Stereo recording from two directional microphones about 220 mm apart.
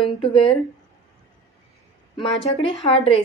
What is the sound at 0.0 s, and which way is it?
Speech, 25° left (ahead or behind).